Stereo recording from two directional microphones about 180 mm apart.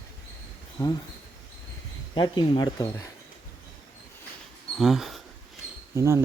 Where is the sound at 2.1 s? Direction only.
25° left (ahead or behind).